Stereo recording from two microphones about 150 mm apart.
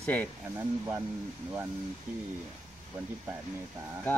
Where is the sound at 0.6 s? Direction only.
15° right (ahead or behind).